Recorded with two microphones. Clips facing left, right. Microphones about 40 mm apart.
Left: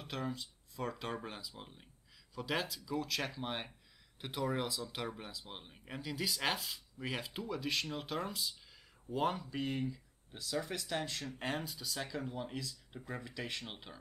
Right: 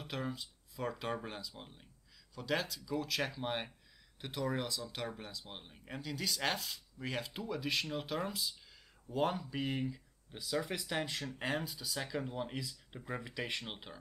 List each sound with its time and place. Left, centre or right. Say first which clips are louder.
0.0 s speech: even; centre
12.2 s speech: right 2 dB; centre
13.3 s speech: right 2 dB; centre